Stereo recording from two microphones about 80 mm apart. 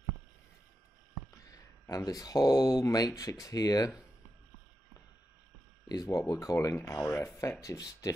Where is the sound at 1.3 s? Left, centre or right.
Left.